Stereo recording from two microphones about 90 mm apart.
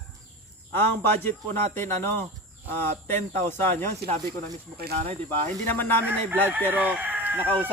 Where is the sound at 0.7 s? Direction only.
25° left (ahead or behind).